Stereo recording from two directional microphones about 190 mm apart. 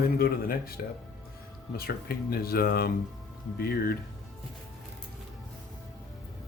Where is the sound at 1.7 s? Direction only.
55° left (ahead or behind).